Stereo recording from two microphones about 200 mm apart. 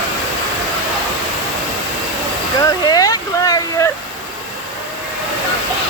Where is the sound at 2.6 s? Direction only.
20° left (ahead or behind).